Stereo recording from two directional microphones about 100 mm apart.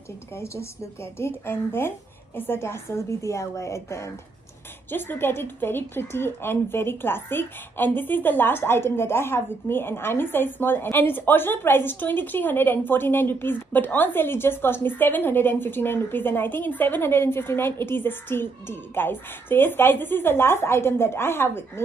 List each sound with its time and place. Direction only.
1.1 s a woman's voice: 25° left (ahead or behind)